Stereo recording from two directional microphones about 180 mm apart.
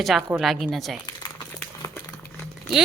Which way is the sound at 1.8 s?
20° left (ahead or behind).